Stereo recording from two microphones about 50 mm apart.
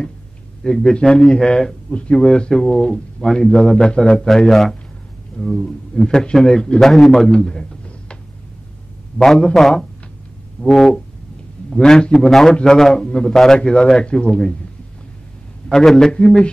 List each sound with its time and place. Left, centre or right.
0.7 s a man's voice: centre
6.8 s a man's voice: centre
7.2 s a man's voice: centre
9.2 s a man's voice: centre
10.6 s a sound: centre
11.7 s a man's voice: centre
15.7 s a man's voice: centre